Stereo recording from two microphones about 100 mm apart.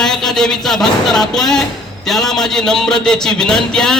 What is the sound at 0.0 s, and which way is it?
Speech, 5° left (ahead or behind).